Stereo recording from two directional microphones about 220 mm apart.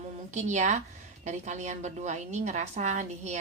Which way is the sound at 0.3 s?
30° right (ahead or behind).